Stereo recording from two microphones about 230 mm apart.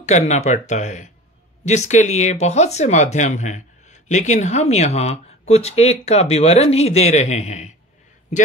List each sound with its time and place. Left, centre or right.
0.0 s speech: left